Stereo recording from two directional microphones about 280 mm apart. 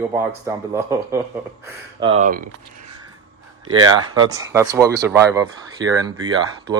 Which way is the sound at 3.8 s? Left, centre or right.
Centre.